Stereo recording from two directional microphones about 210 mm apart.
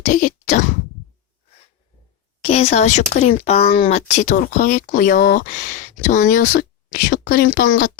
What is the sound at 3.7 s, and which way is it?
Speech, 45° left (ahead or behind).